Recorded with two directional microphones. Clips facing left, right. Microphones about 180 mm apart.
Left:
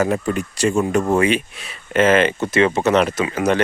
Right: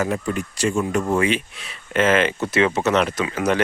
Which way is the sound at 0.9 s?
35° left (ahead or behind).